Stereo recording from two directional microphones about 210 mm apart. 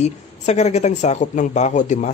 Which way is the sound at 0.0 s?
30° left (ahead or behind).